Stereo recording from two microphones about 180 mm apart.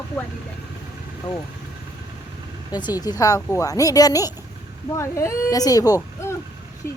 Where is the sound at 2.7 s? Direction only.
25° left (ahead or behind).